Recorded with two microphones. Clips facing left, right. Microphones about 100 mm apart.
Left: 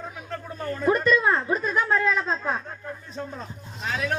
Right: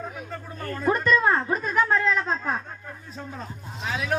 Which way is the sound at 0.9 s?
10° left (ahead or behind).